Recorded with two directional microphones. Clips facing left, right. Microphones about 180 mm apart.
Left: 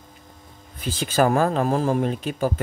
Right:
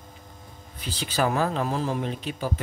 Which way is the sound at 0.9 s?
45° left (ahead or behind).